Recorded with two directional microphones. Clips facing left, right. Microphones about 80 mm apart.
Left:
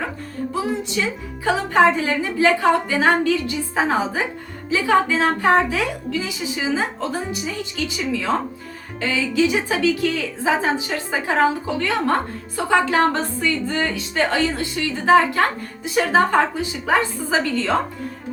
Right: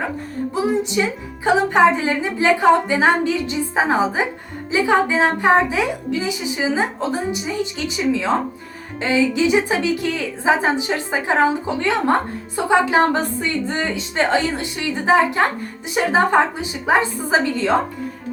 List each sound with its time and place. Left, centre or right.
0.5 s music: centre
1.5 s speech: right